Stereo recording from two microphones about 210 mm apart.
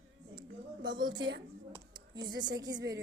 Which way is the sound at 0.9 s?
20° right (ahead or behind).